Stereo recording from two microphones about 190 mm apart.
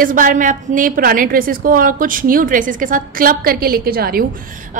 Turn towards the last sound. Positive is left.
turn(degrees=-55)  # may be behind; listen again after turning